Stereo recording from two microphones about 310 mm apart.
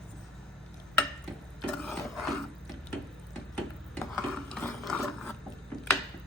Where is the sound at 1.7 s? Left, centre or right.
Centre.